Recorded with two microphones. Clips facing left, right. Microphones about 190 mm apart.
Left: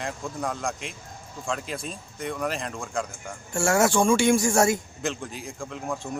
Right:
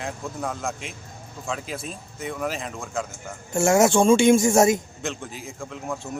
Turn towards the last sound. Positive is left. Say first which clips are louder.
# even
turn(degrees=0)  # may be behind; listen again after turning